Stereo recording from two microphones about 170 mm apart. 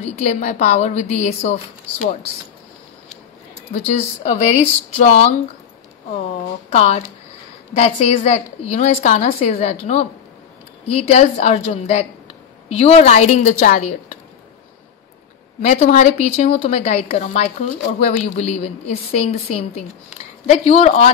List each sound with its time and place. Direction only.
0.0 s a woman's voice: 40° left (ahead or behind)
3.7 s a woman's voice: 40° left (ahead or behind)
6.7 s a woman's voice: 40° left (ahead or behind)
15.6 s a woman's voice: 45° left (ahead or behind)
20.4 s a woman's voice: 40° left (ahead or behind)